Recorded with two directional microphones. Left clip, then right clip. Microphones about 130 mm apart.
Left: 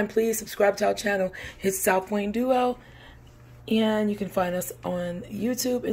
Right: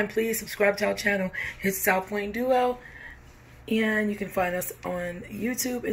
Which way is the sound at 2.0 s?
90° left.